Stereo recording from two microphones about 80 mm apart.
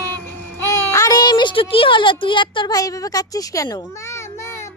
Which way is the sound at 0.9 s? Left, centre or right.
Left.